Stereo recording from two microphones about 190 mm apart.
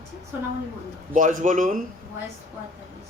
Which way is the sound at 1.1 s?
45° right (ahead or behind).